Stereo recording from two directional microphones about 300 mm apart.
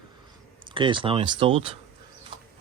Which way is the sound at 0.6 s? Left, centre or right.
Centre.